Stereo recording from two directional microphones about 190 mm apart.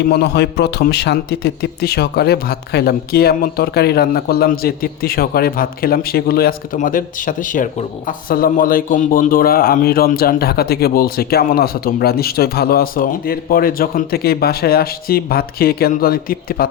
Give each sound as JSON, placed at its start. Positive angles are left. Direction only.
{"t": 0.1, "sound": "a man's voice", "side_deg": 60}